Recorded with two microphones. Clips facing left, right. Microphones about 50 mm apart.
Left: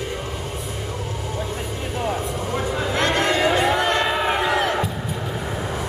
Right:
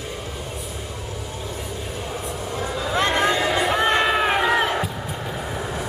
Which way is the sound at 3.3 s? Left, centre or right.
Left.